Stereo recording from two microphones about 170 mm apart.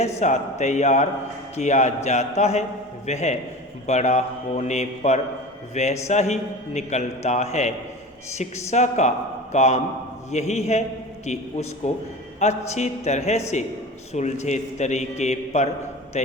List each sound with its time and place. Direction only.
0.0 s a man's voice: 45° left (ahead or behind)